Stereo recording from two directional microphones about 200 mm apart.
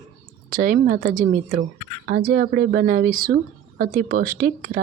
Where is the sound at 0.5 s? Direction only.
45° right (ahead or behind).